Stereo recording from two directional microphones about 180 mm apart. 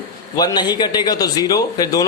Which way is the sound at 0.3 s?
20° left (ahead or behind).